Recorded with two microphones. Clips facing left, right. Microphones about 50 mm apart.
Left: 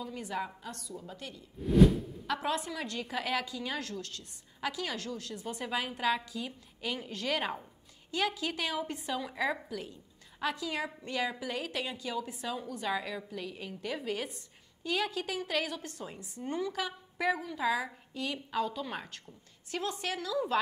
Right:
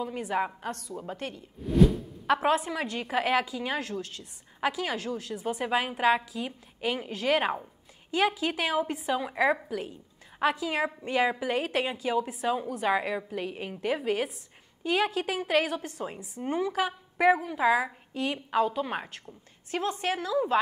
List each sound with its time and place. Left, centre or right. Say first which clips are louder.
0.0 s a woman's voice: right 7 dB; right
0.6 s a woman's voice: right 7 dB; right
1.6 s whoosh: right 1 dB; centre
2.2 s a woman's voice: right 9 dB; right; by 5.7 s centre
5.7 s a woman's voice: right 6 dB; right
10.4 s a woman's voice: right 7 dB; right
15.6 s a woman's voice: right 6 dB; centre